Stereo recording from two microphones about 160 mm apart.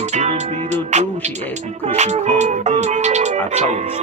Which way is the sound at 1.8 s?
45° right (ahead or behind).